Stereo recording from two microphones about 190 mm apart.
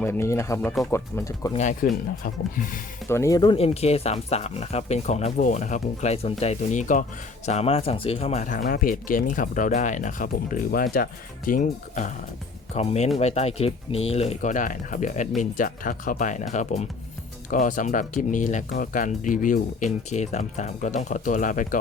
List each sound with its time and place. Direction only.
0.0 s speech: 10° left (ahead or behind)
1.5 s speech: 40° left (ahead or behind)
3.1 s speech: 15° left (ahead or behind); by 21.8 s 45° left (ahead or behind)